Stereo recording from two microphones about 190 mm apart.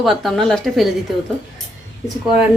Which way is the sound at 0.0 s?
Centre (ahead or behind).